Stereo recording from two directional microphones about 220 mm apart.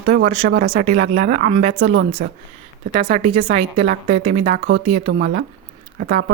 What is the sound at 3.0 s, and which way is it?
Speech, 25° right (ahead or behind).